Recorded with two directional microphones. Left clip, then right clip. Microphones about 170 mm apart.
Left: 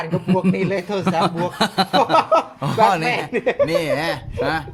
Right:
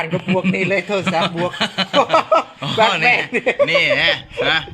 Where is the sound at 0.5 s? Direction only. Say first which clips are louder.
Right 4 dB; 25° right (ahead or behind).